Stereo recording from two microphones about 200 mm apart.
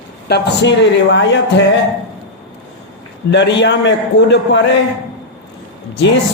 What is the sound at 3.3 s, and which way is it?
Speech, 60° left (ahead or behind).